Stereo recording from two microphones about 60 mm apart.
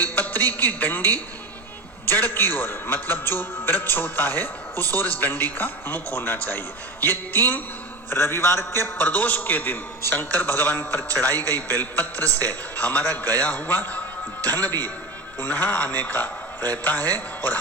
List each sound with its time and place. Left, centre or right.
0.2 s a sound: left
0.5 s a man's voice: left
9.0 s a man's voice: left